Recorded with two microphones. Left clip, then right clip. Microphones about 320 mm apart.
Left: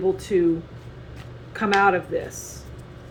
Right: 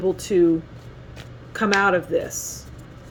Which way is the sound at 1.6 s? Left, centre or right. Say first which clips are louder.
Even; right.